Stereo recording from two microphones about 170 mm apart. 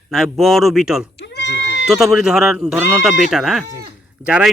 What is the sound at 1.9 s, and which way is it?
Speech, centre (ahead or behind).